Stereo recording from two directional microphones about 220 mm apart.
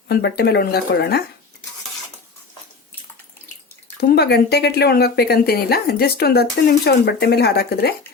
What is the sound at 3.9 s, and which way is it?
Speech, 45° left (ahead or behind).